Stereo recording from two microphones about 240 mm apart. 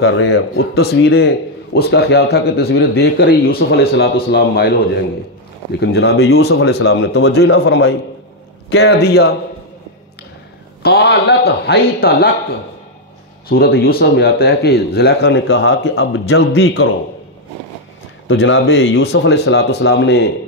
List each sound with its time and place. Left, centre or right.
0.0 s a man's voice: left
1.8 s speech: left
10.8 s speech: left
13.5 s speech: left
18.3 s speech: left